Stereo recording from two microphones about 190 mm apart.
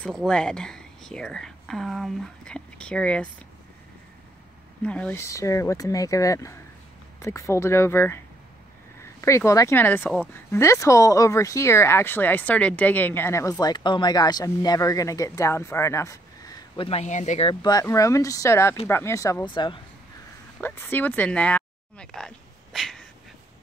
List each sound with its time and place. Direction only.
0.0 s speech: 5° left (ahead or behind)
4.8 s speech: 5° left (ahead or behind); by 19.8 s 25° left (ahead or behind)
20.6 s a sound: 10° left (ahead or behind)